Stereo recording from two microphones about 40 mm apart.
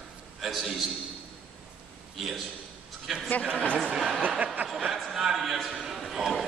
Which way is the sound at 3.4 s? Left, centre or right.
Left.